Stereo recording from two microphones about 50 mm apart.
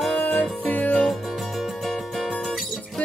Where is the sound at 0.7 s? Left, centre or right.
Left.